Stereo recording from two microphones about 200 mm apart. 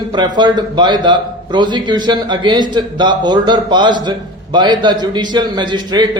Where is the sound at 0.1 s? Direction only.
20° right (ahead or behind).